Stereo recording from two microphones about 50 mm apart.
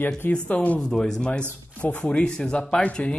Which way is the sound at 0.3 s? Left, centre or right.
Left.